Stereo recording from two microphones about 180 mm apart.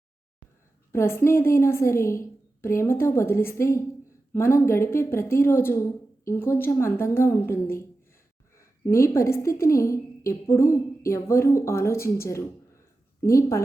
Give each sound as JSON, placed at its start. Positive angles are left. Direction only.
{"t": 0.9, "sound": "a woman's voice", "side_deg": 15}
{"t": 13.2, "sound": "a woman's voice", "side_deg": 15}